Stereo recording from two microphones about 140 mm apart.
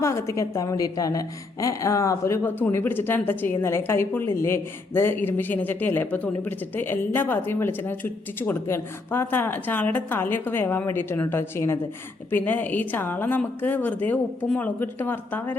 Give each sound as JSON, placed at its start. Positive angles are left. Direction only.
{"t": 0.0, "sound": "a woman's voice", "side_deg": 20}